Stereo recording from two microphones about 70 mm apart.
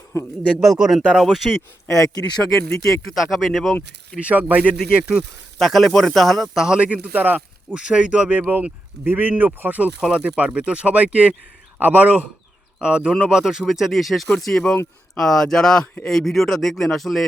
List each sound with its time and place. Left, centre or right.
0.6 s speech: centre
3.2 s speech: centre
4.2 s speech: right
4.8 s speech: centre
5.5 s speech: centre